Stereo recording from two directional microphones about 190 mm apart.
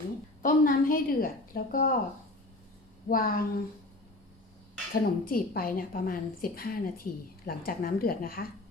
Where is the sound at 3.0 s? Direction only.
50° left (ahead or behind).